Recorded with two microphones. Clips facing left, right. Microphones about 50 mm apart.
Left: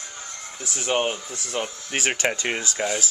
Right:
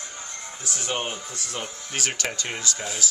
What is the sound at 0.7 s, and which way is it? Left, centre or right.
Speech, centre.